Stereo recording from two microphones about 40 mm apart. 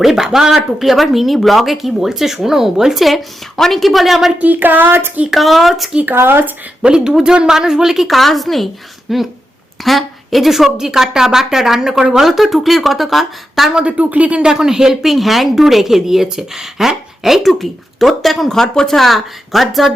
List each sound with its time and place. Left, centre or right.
0.0 s speech: centre
4.4 s a sound: right
5.3 s speech: centre
6.1 s speech: right
6.8 s a woman's voice: centre
13.8 s speech: right
14.5 s speech: centre
15.1 s speech: centre